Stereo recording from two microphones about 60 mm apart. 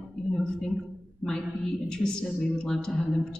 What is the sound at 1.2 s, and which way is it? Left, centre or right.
A woman's voice, centre.